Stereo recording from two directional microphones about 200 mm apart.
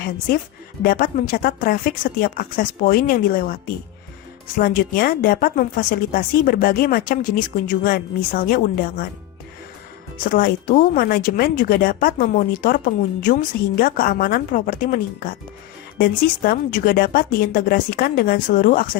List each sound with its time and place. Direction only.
0.9 s speech: 45° left (ahead or behind)
10.2 s speech: 45° left (ahead or behind)